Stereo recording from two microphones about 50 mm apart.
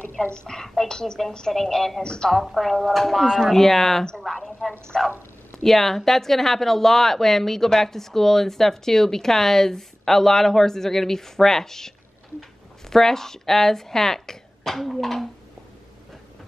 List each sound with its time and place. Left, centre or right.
0.5 s speech: centre
2.4 s a woman's voice: centre
12.9 s speech: centre